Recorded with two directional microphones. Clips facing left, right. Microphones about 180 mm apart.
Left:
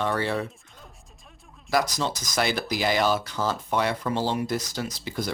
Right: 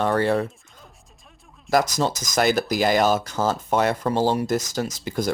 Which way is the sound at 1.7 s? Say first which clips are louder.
Right 4 dB; 45° right (ahead or behind).